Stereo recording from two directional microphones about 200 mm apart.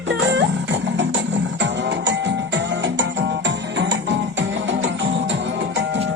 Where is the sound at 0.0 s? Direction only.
65° right (ahead or behind).